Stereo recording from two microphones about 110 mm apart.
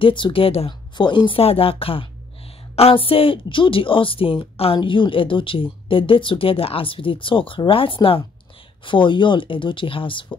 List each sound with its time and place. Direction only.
0.0 s speech: 50° left (ahead or behind)
0.9 s a woman's voice: 45° left (ahead or behind)